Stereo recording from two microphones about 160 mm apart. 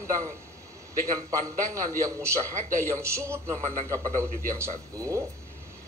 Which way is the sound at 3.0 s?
15° right (ahead or behind).